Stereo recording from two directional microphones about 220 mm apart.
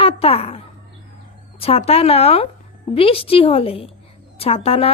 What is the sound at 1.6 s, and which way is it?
A woman's voice, 25° left (ahead or behind).